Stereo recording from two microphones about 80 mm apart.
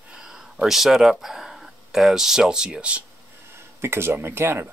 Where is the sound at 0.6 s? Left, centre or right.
Centre.